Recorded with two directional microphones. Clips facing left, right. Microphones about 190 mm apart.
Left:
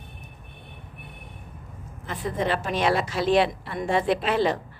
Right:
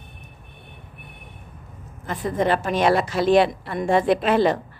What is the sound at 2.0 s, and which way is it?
A woman's voice, 50° right (ahead or behind).